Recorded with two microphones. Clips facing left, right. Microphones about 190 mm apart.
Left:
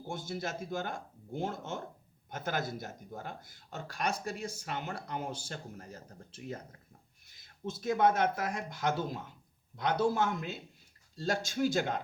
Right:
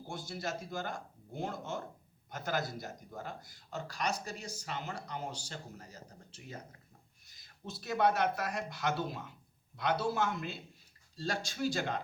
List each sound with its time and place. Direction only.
0.1 s speech: 50° left (ahead or behind)